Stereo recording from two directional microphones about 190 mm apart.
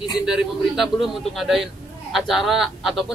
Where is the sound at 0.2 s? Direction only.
5° right (ahead or behind).